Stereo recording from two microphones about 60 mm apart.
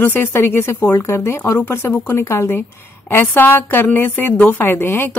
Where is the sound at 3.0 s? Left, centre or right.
Left.